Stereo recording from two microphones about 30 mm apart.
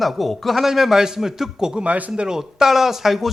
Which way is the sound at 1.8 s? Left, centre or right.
Right.